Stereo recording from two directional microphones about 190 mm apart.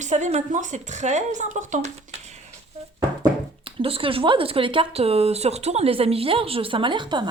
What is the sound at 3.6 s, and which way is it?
Speech, 30° right (ahead or behind).